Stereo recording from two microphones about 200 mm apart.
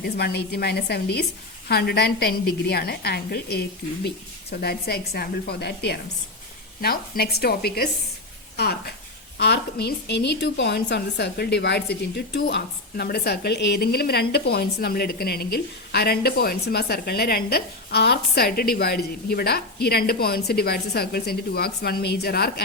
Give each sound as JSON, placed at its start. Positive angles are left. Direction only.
{"t": 0.0, "sound": "a woman's voice", "side_deg": 50}